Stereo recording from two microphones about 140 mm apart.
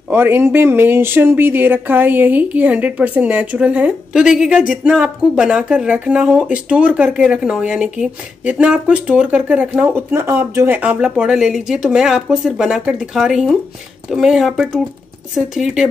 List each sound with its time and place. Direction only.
0.1 s speech: 15° right (ahead or behind)